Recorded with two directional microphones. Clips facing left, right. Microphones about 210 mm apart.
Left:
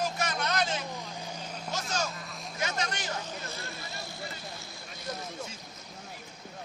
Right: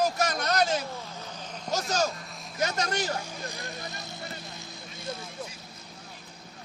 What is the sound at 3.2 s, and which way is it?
Vehicle, 15° right (ahead or behind).